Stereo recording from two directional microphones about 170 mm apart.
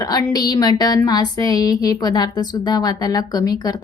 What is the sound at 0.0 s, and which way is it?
A woman's voice, 20° left (ahead or behind).